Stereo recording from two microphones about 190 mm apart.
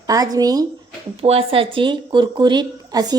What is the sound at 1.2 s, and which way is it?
A woman's voice, 30° right (ahead or behind).